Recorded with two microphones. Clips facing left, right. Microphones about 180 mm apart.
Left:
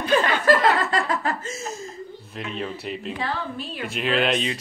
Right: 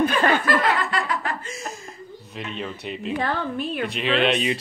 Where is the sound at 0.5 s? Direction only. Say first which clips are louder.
Left 3 dB; 45° left (ahead or behind).